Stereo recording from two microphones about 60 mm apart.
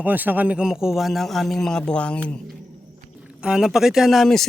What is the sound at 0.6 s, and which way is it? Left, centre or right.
Speech, centre.